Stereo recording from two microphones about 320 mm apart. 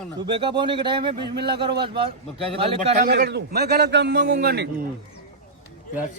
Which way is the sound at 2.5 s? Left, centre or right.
Centre.